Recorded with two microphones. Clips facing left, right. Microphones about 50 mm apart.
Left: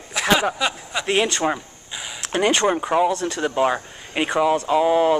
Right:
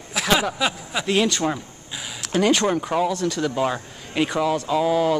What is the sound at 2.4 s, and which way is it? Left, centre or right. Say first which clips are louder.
Speech: left 1 dB; centre.